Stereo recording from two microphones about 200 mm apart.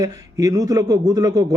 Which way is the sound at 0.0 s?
20° right (ahead or behind).